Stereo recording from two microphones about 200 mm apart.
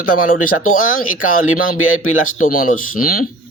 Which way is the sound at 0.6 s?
40° left (ahead or behind).